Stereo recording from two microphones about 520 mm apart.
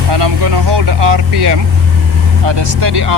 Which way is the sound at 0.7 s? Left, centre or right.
Right.